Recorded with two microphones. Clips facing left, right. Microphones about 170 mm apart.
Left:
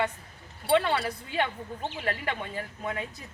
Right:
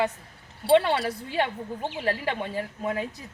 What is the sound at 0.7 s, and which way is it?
A woman's voice, 30° right (ahead or behind).